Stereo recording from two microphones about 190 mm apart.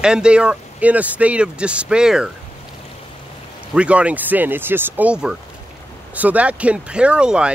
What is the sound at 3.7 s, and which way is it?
Speech, 5° right (ahead or behind).